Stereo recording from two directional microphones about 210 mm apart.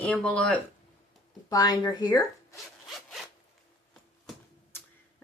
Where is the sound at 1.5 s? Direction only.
15° left (ahead or behind).